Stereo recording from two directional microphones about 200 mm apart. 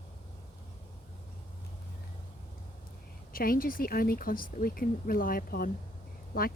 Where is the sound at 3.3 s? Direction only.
45° left (ahead or behind).